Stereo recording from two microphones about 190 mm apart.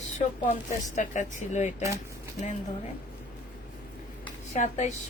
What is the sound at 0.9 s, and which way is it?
Speech, 40° left (ahead or behind).